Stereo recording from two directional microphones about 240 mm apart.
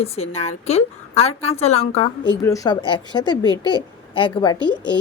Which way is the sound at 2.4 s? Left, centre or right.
Centre.